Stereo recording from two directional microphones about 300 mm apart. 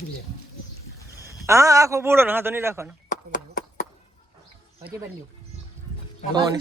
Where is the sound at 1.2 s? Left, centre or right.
Centre.